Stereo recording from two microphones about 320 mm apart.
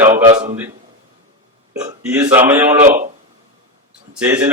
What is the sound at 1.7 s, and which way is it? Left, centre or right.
Speech, centre.